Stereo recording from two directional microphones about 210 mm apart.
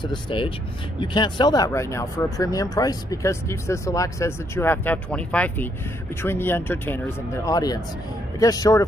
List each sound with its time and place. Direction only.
0.0 s speech: 25° left (ahead or behind)